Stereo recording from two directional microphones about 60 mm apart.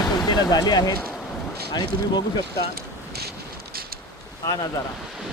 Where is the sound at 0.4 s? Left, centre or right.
Left.